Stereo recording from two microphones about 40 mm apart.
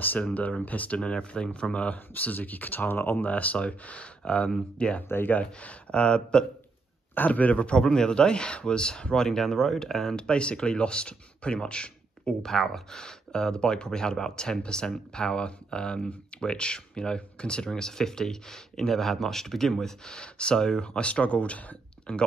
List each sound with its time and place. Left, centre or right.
0.3 s speech: left
1.9 s speech: left
3.3 s speech: left
5.0 s speech: left
5.3 s speech: left
7.2 s speech: left
7.5 s speech: left
7.8 s speech: centre
10.1 s speech: left
12.4 s speech: centre; by 21.7 s left
22.1 s speech: left